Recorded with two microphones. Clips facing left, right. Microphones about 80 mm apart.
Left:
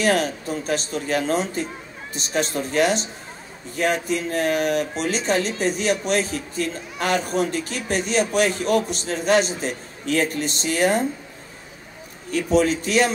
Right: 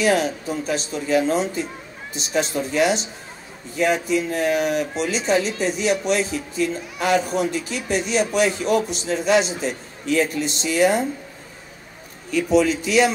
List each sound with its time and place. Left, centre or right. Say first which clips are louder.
0.0 s speech: right 1 dB; left
12.3 s speech: right 1 dB; left